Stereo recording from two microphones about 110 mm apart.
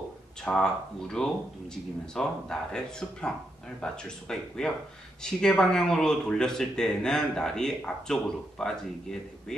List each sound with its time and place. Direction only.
0.4 s speech: 5° left (ahead or behind)